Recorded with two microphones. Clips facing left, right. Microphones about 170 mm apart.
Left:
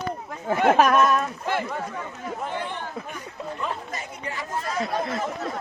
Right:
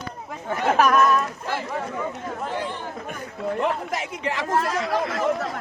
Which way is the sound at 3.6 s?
90° right.